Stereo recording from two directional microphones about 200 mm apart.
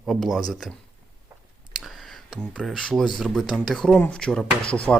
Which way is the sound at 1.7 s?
Centre (ahead or behind).